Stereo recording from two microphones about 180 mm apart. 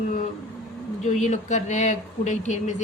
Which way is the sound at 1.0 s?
40° left (ahead or behind).